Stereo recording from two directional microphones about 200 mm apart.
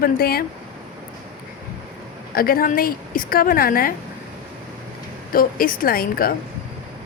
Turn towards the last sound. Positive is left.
turn(degrees=45)  # may be behind; listen again after turning